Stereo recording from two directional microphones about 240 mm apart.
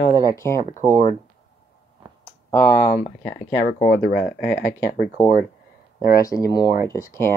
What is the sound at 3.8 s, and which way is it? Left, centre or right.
Speech, left.